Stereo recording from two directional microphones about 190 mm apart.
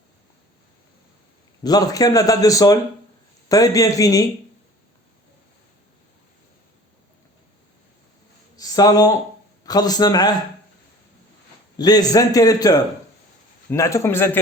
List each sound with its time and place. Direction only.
1.6 s a man's voice: 20° left (ahead or behind)
8.5 s a sound: 20° left (ahead or behind)
9.6 s a man's voice: 20° left (ahead or behind)
11.8 s a man's voice: 20° left (ahead or behind)